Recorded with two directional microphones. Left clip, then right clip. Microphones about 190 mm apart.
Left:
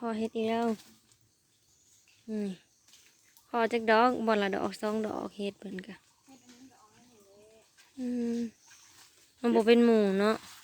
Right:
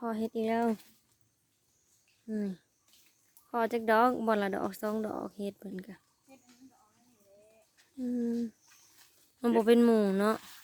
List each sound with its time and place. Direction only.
0.0 s speech: 15° right (ahead or behind)
2.2 s speech: 20° right (ahead or behind)
8.0 s speech: 20° right (ahead or behind)
9.4 s speech: 20° right (ahead or behind)
10.3 s speech: 5° left (ahead or behind)